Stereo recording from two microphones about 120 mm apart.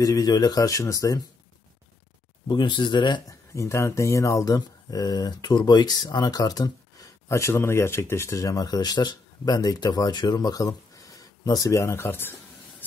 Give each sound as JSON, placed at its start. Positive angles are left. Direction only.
{"t": 0.0, "sound": "speech", "side_deg": 30}
{"t": 2.4, "sound": "speech", "side_deg": 40}
{"t": 3.5, "sound": "speech", "side_deg": 25}